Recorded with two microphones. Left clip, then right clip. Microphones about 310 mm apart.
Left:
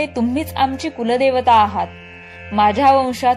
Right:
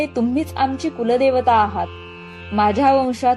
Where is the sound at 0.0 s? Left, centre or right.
Left.